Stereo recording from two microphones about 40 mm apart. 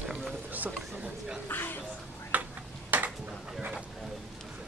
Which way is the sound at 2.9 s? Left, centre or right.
Right.